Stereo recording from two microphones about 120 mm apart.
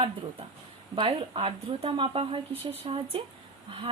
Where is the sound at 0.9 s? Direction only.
50° right (ahead or behind).